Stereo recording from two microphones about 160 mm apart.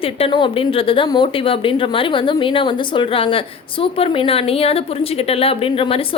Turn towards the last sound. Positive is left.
turn(degrees=35)  # may be behind; listen again after turning